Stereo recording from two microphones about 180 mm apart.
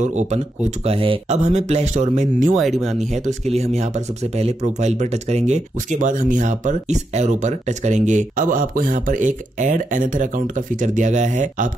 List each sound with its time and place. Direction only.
0.0 s speech: 40° right (ahead or behind)
2.5 s speech: centre (ahead or behind)
3.3 s speech: 40° right (ahead or behind)